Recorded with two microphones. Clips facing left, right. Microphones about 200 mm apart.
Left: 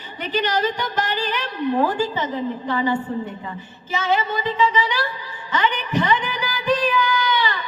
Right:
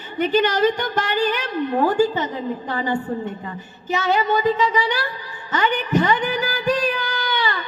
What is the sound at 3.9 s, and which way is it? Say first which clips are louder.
A woman's voice: right 3 dB; 45° right (ahead or behind).